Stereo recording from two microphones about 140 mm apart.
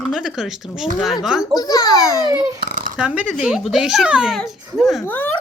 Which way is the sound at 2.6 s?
85° right.